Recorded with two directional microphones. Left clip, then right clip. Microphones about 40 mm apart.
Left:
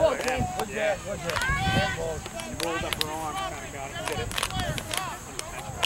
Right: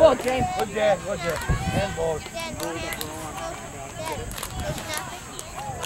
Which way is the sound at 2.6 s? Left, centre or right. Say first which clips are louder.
Left 5 dB; left.